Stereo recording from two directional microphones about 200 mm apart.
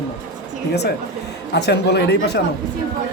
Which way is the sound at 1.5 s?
55° left (ahead or behind).